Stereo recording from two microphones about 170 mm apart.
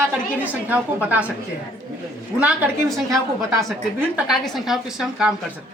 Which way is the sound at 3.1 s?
20° right (ahead or behind).